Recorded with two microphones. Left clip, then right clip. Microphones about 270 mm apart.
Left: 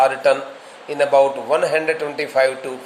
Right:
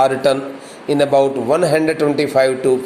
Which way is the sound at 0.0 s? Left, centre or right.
Centre.